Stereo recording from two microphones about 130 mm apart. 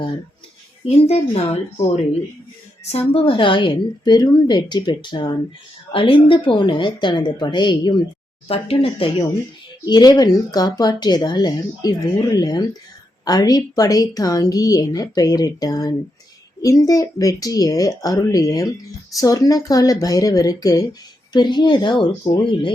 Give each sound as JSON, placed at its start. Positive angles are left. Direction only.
{"t": 0.9, "sound": "speech", "side_deg": 50}
{"t": 3.1, "sound": "speech", "side_deg": 45}
{"t": 8.4, "sound": "speech", "side_deg": 45}
{"t": 9.8, "sound": "a woman's voice", "side_deg": 30}